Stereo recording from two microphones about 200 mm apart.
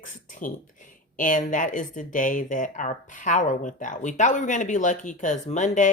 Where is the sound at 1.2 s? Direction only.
40° left (ahead or behind).